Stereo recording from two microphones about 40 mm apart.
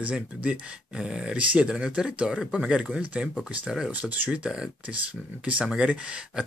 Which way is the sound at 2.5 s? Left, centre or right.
Right.